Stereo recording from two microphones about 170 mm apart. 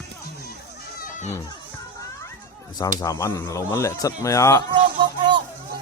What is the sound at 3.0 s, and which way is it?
Speech, 20° left (ahead or behind).